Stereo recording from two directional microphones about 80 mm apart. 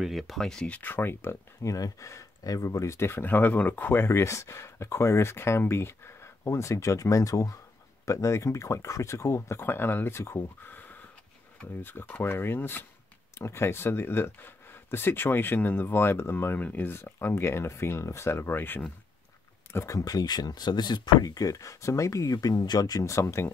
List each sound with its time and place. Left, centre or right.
0.0 s speech: centre
0.7 s speech: left
1.6 s speech: left
19.7 s speech: left